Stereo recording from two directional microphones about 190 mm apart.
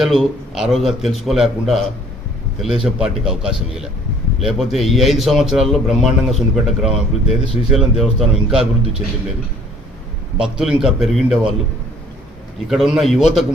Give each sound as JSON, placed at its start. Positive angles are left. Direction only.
{"t": 0.0, "sound": "a man's voice", "side_deg": 0}
{"t": 2.8, "sound": "a man's voice", "side_deg": -5}
{"t": 10.3, "sound": "a man's voice", "side_deg": -5}
{"t": 12.6, "sound": "a man's voice", "side_deg": 0}